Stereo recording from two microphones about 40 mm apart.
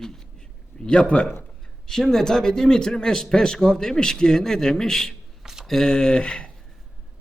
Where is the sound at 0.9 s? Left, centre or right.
Left.